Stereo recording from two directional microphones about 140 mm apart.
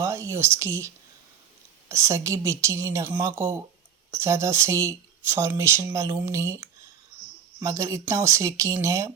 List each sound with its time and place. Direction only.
0.0 s speech: 20° right (ahead or behind)